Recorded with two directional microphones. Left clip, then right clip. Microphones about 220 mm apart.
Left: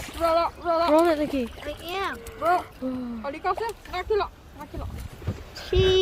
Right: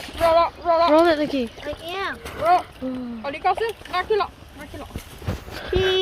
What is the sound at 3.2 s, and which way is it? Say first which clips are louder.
Speech: right 6 dB; 55° left (ahead or behind).